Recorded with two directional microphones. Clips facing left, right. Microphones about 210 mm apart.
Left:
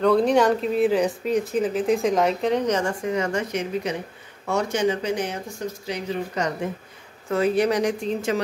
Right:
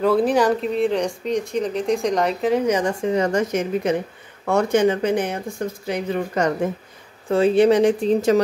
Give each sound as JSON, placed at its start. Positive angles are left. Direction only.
{"t": 0.0, "sound": "speech", "side_deg": -5}
{"t": 3.0, "sound": "speech", "side_deg": -35}
{"t": 4.5, "sound": "speech", "side_deg": -55}
{"t": 7.2, "sound": "speech", "side_deg": -30}